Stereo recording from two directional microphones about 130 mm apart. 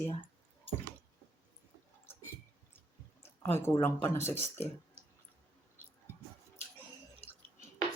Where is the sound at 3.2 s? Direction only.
20° left (ahead or behind).